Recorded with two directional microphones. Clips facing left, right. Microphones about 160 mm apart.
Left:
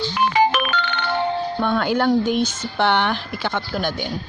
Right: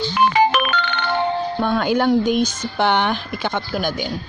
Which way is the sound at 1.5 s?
15° right (ahead or behind).